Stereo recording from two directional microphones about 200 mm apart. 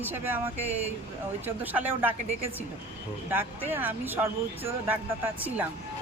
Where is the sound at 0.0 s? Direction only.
10° right (ahead or behind).